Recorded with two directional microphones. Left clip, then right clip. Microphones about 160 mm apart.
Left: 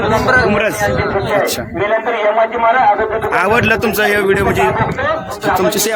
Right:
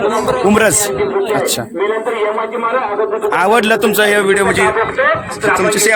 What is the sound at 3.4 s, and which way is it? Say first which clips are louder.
Speech: right 2 dB; 20° right (ahead or behind).